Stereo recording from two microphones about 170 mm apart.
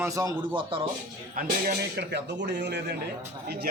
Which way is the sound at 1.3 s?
55° right (ahead or behind).